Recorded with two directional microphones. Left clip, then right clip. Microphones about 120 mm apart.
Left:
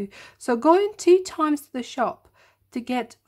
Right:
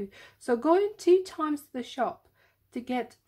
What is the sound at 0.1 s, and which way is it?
Speech, 35° left (ahead or behind).